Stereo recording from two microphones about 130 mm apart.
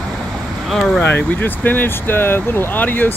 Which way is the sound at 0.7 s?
Centre (ahead or behind).